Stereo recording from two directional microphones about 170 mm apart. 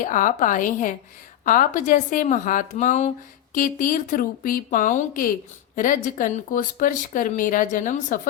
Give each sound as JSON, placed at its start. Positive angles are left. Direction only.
{"t": 0.0, "sound": "speech", "side_deg": 50}